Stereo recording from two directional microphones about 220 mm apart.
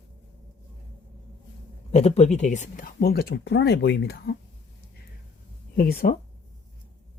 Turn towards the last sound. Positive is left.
turn(degrees=40)  # may be behind; listen again after turning